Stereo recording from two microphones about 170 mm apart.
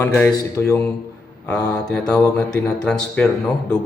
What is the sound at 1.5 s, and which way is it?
Mantra, 20° left (ahead or behind).